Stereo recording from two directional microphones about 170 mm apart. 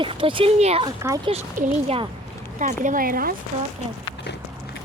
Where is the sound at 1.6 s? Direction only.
50° right (ahead or behind).